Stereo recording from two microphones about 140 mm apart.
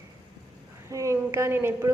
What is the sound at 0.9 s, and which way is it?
A woman's voice, 20° right (ahead or behind).